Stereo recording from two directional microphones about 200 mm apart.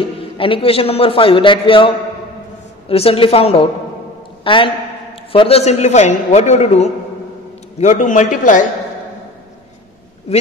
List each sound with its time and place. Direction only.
0.4 s a man's voice: 25° left (ahead or behind)